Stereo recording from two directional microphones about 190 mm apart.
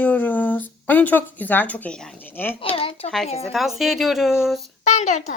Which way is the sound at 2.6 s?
30° left (ahead or behind).